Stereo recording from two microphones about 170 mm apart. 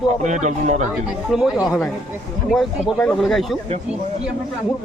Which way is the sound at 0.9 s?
5° right (ahead or behind).